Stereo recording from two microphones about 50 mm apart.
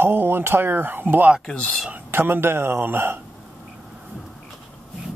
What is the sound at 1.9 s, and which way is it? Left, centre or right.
Speech, right.